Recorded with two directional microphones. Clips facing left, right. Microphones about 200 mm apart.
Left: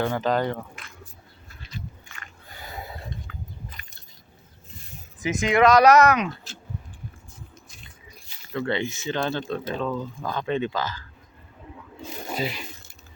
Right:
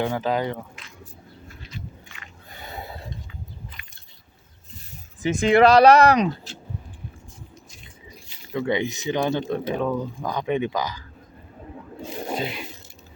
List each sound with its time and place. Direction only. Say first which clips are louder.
0.0 s speech: even; 10° right (ahead or behind)
2.0 s a sound: even; 45° left (ahead or behind)
2.6 s a sound: right 1 dB; 25° right (ahead or behind)
3.8 s keys jangling: even; 40° left (ahead or behind)
5.2 s speech: right 3 dB; 30° right (ahead or behind)
8.5 s speech: right 3 dB; 15° right (ahead or behind)
12.3 s speech: even; centre (ahead or behind)